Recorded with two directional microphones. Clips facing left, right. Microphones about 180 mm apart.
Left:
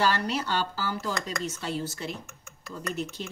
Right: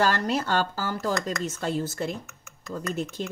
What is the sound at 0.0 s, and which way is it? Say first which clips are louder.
Speech: right 2 dB; 45° right (ahead or behind).